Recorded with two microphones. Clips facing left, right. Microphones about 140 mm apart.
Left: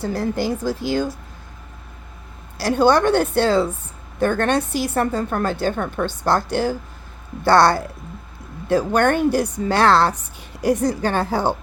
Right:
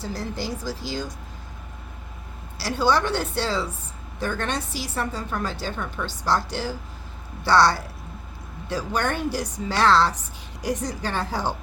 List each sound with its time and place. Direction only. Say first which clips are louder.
0.0 s a woman's voice: left 8 dB; 55° left (ahead or behind)
2.6 s a woman's voice: left 6 dB; 55° left (ahead or behind)